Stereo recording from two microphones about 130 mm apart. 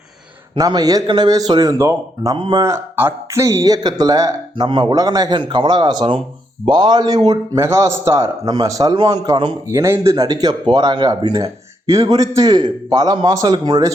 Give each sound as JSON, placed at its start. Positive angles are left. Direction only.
{"t": 0.5, "sound": "a man's voice", "side_deg": -30}
{"t": 2.3, "sound": "speech", "side_deg": -35}
{"t": 2.6, "sound": "a man's voice", "side_deg": -20}
{"t": 9.6, "sound": "a man's voice", "side_deg": -20}